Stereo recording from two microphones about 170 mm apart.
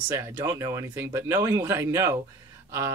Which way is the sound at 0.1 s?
15° right (ahead or behind).